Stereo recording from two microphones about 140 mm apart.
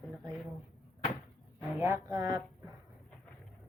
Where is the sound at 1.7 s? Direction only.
20° right (ahead or behind).